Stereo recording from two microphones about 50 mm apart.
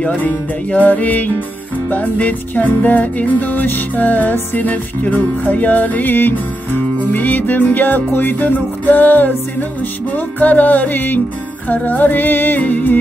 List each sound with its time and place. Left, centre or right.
0.7 s music: left